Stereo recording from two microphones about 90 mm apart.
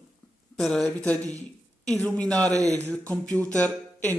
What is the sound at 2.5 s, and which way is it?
Speech, 40° right (ahead or behind).